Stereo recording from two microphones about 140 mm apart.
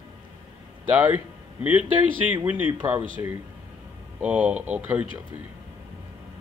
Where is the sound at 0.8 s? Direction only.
10° right (ahead or behind).